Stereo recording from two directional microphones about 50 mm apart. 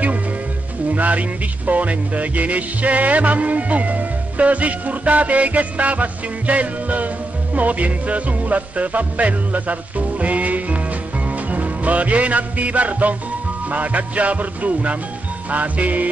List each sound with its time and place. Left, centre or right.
0.9 s music: right